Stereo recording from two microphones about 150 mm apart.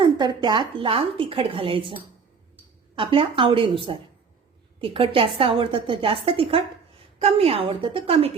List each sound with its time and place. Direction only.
0.0 s a woman's voice: 30° right (ahead or behind)
3.0 s a woman's voice: 35° right (ahead or behind)